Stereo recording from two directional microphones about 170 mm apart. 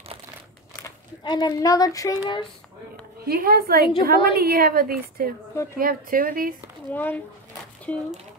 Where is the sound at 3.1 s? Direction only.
65° right (ahead or behind).